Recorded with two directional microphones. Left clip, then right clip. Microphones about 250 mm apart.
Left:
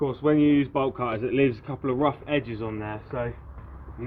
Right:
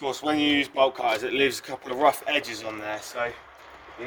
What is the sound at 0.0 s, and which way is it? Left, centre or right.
Speech, right.